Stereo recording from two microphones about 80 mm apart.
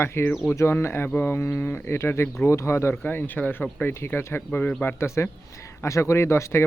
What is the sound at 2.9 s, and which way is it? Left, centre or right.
Speech, left.